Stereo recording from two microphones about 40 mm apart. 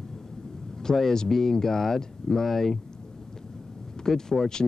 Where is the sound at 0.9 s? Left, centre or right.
Centre.